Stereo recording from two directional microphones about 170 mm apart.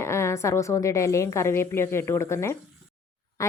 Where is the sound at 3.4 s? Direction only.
20° left (ahead or behind).